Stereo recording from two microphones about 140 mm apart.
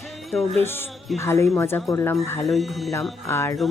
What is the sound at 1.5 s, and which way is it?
Speech, 20° left (ahead or behind).